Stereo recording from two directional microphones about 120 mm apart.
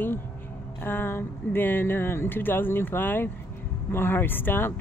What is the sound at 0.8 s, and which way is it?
Speech, 20° left (ahead or behind).